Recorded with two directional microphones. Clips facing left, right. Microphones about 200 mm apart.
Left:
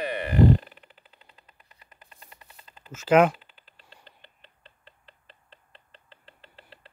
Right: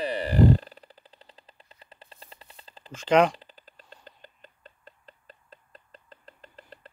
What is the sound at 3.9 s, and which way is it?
Rodents, 40° right (ahead or behind).